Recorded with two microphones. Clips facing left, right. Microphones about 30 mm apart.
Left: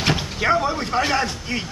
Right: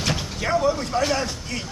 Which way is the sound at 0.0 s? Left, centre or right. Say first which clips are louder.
Left 4 dB; left.